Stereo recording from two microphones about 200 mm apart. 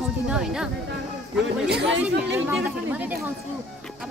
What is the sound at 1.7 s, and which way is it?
Speech, 55° right (ahead or behind).